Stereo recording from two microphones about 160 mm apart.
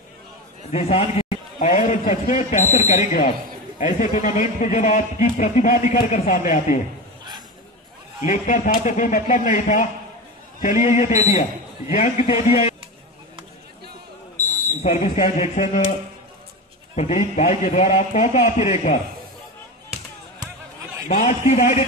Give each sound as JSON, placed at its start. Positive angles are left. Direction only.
{"t": 0.7, "sound": "a man's voice", "side_deg": 40}
{"t": 1.6, "sound": "speech", "side_deg": 50}
{"t": 8.2, "sound": "speech", "side_deg": 50}
{"t": 11.9, "sound": "a man's voice", "side_deg": 40}
{"t": 14.8, "sound": "speech", "side_deg": 45}
{"t": 16.9, "sound": "speech", "side_deg": 45}
{"t": 21.1, "sound": "speech", "side_deg": 50}